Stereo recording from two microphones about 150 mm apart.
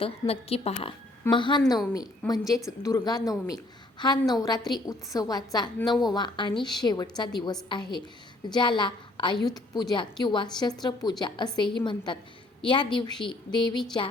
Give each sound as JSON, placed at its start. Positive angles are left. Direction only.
{"t": 0.0, "sound": "a woman's voice", "side_deg": 40}